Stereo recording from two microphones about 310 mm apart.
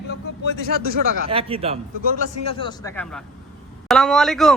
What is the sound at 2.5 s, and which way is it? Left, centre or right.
Speech, centre.